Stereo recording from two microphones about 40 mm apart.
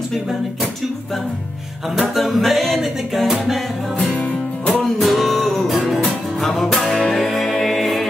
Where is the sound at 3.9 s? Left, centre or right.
Left.